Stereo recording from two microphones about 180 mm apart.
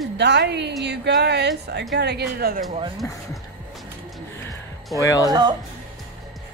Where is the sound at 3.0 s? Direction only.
15° left (ahead or behind).